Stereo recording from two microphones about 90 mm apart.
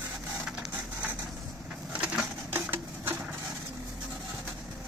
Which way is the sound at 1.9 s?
10° right (ahead or behind).